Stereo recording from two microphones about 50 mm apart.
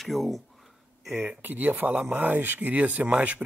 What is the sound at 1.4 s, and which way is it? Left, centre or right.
Speech, right.